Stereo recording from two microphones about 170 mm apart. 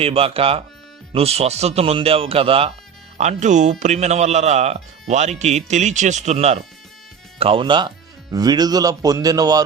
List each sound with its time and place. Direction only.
0.0 s speech: 35° right (ahead or behind)
3.2 s speech: 45° right (ahead or behind); by 9.6 s 20° right (ahead or behind)